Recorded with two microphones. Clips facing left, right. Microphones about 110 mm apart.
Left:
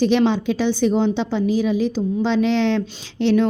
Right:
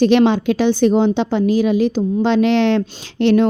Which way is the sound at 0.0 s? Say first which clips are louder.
Right 4 dB; 65° right (ahead or behind).